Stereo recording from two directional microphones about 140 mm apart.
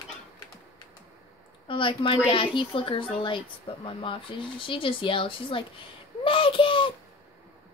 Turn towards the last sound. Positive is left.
turn(degrees=35)  # may be behind; listen again after turning